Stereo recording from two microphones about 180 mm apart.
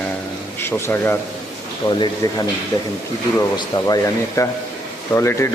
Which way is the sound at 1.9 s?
25° left (ahead or behind).